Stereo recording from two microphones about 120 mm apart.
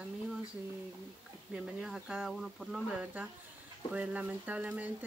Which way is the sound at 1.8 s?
5° right (ahead or behind).